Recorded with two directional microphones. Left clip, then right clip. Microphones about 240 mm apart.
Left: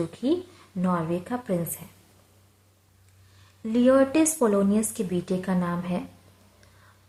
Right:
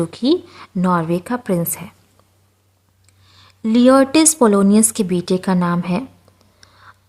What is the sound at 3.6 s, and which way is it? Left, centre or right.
A woman's voice, right.